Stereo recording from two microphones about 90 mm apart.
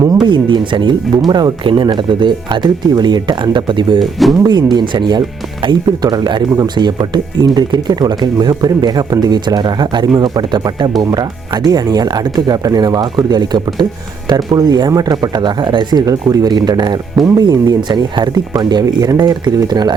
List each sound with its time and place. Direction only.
0.3 s speech: 65° right (ahead or behind)
4.0 s speech: centre (ahead or behind)
4.4 s speech: 50° right (ahead or behind)